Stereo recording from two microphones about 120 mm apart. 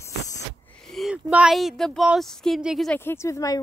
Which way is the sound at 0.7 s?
5° left (ahead or behind).